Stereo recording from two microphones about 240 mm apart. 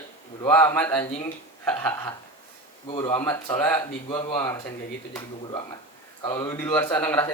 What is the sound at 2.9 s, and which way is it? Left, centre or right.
Speech, left.